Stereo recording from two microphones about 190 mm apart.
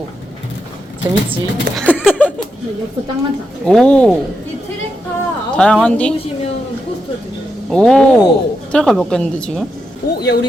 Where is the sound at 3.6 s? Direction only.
5° left (ahead or behind).